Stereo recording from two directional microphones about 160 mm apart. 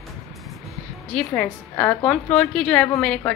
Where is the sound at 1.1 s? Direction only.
10° left (ahead or behind).